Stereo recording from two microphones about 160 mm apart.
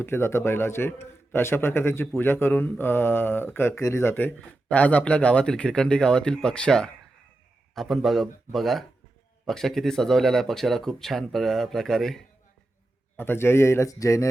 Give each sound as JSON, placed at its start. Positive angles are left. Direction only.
{"t": 0.0, "sound": "a man's voice", "side_deg": 15}
{"t": 13.1, "sound": "a man's voice", "side_deg": 15}